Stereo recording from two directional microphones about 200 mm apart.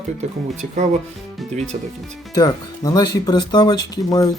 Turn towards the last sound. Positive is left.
turn(degrees=20)  # may be behind; listen again after turning